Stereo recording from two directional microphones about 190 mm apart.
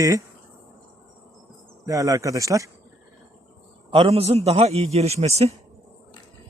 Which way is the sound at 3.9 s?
30° right (ahead or behind).